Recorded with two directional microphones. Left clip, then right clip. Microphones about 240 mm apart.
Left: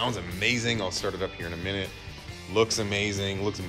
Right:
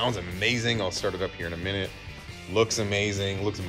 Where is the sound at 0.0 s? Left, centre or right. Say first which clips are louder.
Right 1 dB; centre.